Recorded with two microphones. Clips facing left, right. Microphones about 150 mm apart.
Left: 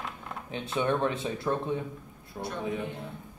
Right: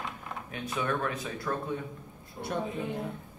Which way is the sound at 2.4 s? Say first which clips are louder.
Left 2 dB; 70° left (ahead or behind).